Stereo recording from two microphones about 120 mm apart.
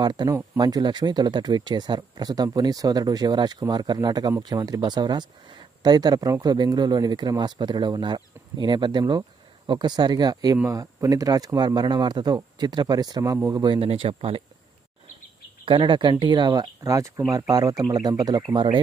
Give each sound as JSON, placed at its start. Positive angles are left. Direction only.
{"t": 0.0, "sound": "speech", "side_deg": -35}
{"t": 13.7, "sound": "speech", "side_deg": -55}
{"t": 15.6, "sound": "speech", "side_deg": -40}